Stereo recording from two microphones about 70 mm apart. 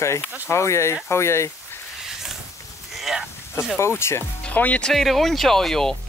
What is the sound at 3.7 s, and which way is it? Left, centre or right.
Speech, left.